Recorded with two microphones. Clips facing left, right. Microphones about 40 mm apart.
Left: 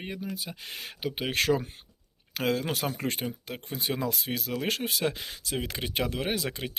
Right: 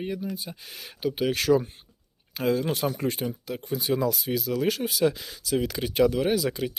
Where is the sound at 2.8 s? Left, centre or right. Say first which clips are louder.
Right 4 dB; left.